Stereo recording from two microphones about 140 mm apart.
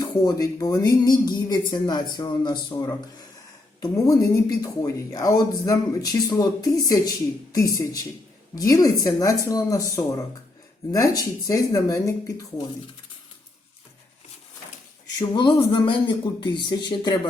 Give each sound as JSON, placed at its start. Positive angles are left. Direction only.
{"t": 0.0, "sound": "speech", "side_deg": 25}
{"t": 15.4, "sound": "speech", "side_deg": 35}